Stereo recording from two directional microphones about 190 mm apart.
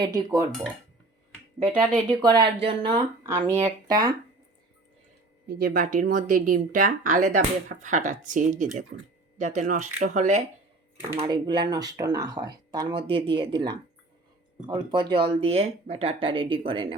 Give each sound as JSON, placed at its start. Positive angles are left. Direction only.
{"t": 0.0, "sound": "speech", "side_deg": -20}
{"t": 1.5, "sound": "speech", "side_deg": -25}
{"t": 3.2, "sound": "speech", "side_deg": -15}
{"t": 5.5, "sound": "speech", "side_deg": -50}
{"t": 11.2, "sound": "speech", "side_deg": -25}
{"t": 14.7, "sound": "speech", "side_deg": -25}